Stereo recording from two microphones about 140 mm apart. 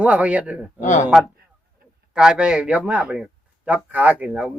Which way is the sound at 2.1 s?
5° right (ahead or behind).